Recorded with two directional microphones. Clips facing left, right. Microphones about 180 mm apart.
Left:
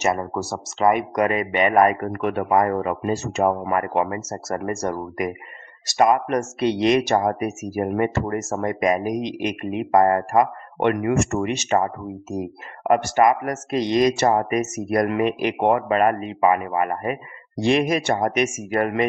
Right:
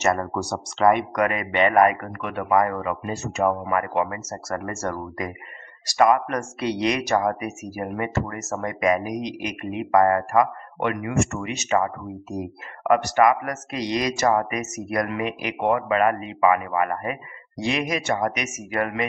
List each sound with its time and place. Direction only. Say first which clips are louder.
0.0 s speech: even; 15° left (ahead or behind)
1.1 s speech: left 2 dB; 25° left (ahead or behind)
4.3 s speech: left 3 dB; 25° left (ahead or behind)